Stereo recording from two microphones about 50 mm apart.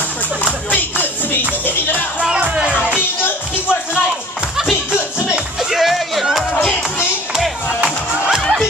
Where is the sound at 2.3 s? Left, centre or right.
Right.